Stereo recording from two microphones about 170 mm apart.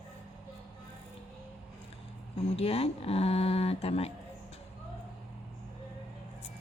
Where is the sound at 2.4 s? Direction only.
35° left (ahead or behind).